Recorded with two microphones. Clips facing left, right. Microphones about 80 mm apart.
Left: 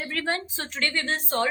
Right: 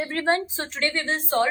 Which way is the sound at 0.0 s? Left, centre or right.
Right.